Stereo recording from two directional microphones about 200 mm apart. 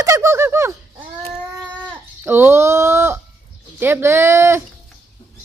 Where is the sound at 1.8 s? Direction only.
10° right (ahead or behind).